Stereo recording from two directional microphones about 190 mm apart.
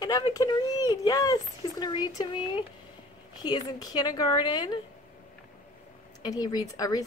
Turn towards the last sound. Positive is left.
turn(degrees=20)  # may be behind; listen again after turning